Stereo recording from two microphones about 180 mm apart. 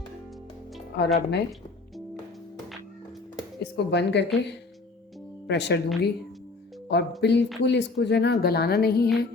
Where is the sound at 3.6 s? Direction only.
70° left (ahead or behind).